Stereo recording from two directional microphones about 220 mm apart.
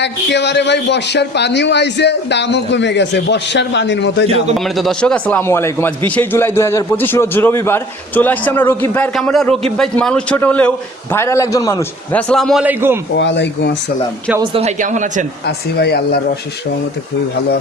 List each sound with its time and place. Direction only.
0.0 s a man's voice: 50° left (ahead or behind)
4.5 s a man's voice: centre (ahead or behind)
13.1 s a man's voice: 55° left (ahead or behind)
14.3 s a man's voice: 15° right (ahead or behind)
14.5 s speech: 30° right (ahead or behind)
15.4 s a man's voice: 45° left (ahead or behind)